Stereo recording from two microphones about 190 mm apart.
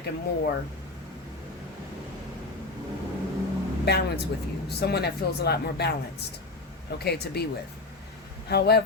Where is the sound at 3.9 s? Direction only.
55° left (ahead or behind).